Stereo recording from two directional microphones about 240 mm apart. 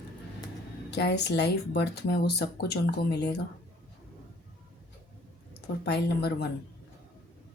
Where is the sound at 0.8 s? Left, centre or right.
Left.